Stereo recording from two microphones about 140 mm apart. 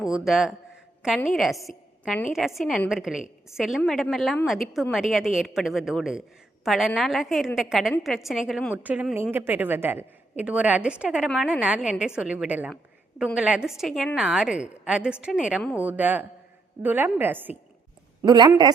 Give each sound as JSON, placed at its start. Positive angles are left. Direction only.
{"t": 0.0, "sound": "a woman's voice", "side_deg": 0}
{"t": 18.2, "sound": "a woman's voice", "side_deg": -30}